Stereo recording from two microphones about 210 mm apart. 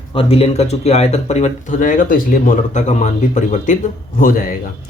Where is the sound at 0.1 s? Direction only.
25° left (ahead or behind).